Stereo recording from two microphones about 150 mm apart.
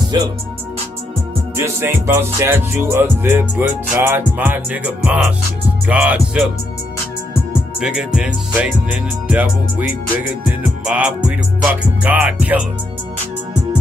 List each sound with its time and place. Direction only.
0.1 s speech: 25° right (ahead or behind)
1.6 s music: 15° right (ahead or behind)
7.8 s music: 5° right (ahead or behind)
10.9 s music: 5° right (ahead or behind)